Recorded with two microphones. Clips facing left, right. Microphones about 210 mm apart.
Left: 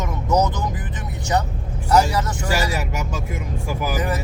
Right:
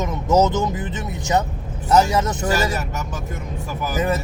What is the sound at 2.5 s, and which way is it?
Speech, 10° left (ahead or behind).